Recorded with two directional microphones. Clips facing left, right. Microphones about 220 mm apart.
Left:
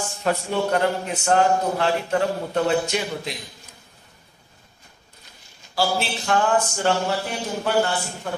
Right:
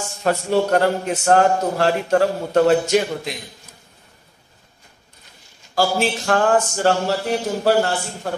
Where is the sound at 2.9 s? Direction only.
40° right (ahead or behind).